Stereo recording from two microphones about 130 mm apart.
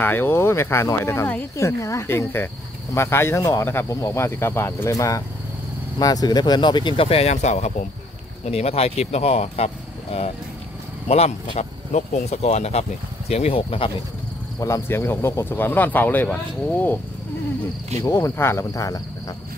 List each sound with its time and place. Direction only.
0.0 s speech: 15° left (ahead or behind); by 9.7 s 55° left (ahead or behind)
11.1 s speech: 55° left (ahead or behind)
14.6 s speech: 20° left (ahead or behind)
18.0 s speech: 20° left (ahead or behind)